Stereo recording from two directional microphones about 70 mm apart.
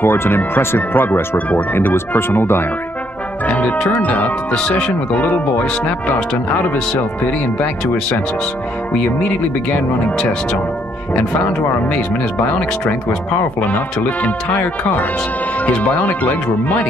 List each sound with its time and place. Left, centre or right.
0.0 s speech: left
3.4 s speech: centre
4.6 s speech: centre
9.7 s speech: centre
13.7 s speech: left